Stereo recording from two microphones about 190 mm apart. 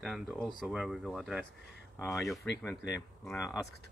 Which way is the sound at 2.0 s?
15° left (ahead or behind).